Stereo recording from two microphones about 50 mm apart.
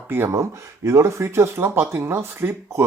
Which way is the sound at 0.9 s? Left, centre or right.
Right.